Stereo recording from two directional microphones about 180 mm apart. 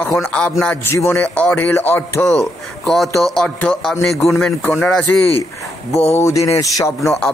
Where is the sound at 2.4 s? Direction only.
Centre (ahead or behind).